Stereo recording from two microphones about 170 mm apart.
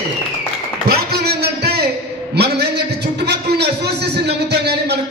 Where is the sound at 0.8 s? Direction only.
70° right (ahead or behind).